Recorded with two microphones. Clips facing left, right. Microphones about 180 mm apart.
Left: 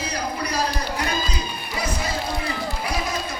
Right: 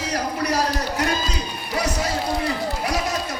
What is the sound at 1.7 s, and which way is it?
Music, 75° right (ahead or behind).